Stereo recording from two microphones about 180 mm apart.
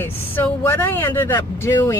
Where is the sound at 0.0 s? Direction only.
10° left (ahead or behind).